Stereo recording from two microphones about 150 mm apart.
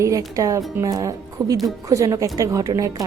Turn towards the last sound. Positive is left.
turn(degrees=-20)  # may be behind; listen again after turning